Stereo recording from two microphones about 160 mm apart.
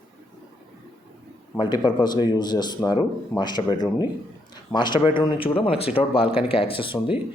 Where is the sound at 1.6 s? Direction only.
25° left (ahead or behind).